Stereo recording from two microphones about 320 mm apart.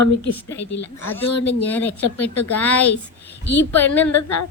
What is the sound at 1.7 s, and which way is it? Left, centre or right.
Speech, centre.